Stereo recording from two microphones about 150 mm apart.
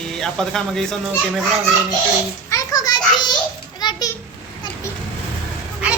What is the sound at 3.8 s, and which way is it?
Children playing, 30° left (ahead or behind).